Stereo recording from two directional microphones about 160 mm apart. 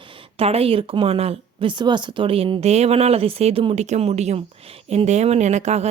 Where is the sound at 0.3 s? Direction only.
40° right (ahead or behind).